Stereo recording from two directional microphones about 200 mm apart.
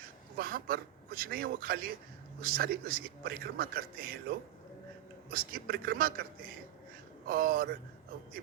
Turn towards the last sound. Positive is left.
turn(degrees=-45)  # may be behind; listen again after turning